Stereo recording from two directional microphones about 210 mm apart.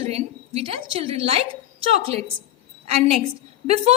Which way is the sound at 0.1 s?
30° right (ahead or behind).